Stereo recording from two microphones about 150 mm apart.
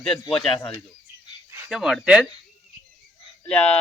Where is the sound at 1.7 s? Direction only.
Centre (ahead or behind).